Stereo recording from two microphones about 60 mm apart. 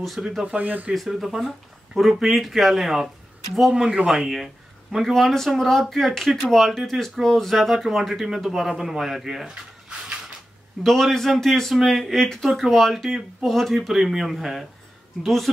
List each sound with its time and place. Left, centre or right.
0.0 s speech: centre
0.6 s speech: right
0.9 s speech: centre
3.7 s speech: centre
5.1 s speech: centre
10.8 s speech: centre